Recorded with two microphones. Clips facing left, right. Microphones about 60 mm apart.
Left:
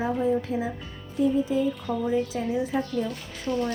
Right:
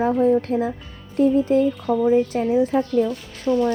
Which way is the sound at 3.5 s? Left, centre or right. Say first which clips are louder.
Right 8 dB; right.